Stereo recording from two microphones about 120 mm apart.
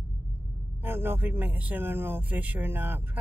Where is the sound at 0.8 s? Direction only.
20° right (ahead or behind).